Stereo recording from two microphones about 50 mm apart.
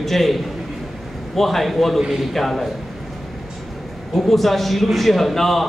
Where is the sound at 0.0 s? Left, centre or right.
Centre.